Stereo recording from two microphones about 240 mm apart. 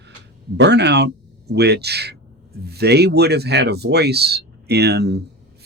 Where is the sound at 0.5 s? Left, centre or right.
Right.